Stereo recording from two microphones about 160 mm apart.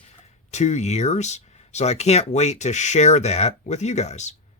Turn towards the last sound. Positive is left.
turn(degrees=45)  # may be behind; listen again after turning